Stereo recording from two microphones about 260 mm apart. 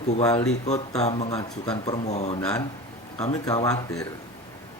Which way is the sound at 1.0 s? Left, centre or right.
Left.